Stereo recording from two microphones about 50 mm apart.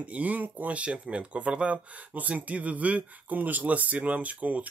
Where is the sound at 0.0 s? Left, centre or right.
Right.